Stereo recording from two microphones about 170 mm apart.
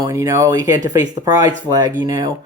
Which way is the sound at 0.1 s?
15° right (ahead or behind).